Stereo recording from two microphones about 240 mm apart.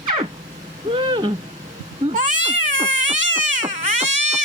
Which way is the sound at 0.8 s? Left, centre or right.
Centre.